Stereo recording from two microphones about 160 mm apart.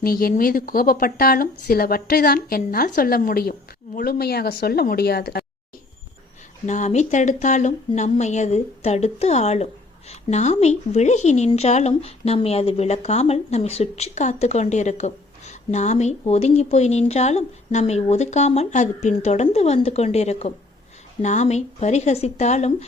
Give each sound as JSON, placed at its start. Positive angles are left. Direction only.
{"t": 0.0, "sound": "speech", "side_deg": 70}
{"t": 6.7, "sound": "a woman's voice", "side_deg": 50}